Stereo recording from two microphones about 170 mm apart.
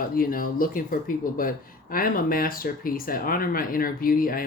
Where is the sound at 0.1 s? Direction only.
55° left (ahead or behind).